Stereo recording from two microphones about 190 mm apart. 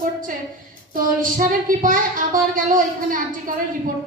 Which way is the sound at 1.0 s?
45° right (ahead or behind).